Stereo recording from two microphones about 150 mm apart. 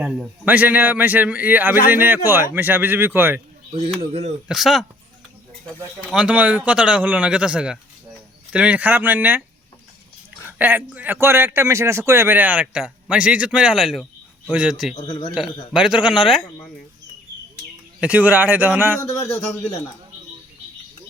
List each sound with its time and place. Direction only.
0.0 s a man's voice: 10° right (ahead or behind)
3.7 s speech: 35° right (ahead or behind)
4.4 s a man's voice: centre (ahead or behind)
10.6 s a man's voice: 10° right (ahead or behind)
14.9 s a man's voice: 30° left (ahead or behind)
15.7 s a man's voice: 5° right (ahead or behind)
18.0 s a man's voice: 10° right (ahead or behind)
19.0 s speech: 45° left (ahead or behind)